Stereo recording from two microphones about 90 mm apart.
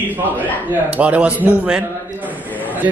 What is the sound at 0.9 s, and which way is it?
A man's voice, 15° right (ahead or behind).